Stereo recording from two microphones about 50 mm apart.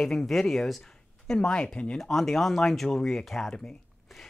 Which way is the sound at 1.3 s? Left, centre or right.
Centre.